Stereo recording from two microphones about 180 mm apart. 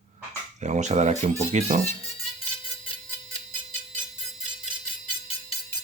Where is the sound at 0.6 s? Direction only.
40° right (ahead or behind).